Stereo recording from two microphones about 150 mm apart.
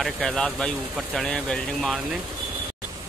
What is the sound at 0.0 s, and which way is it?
Speech, 5° left (ahead or behind).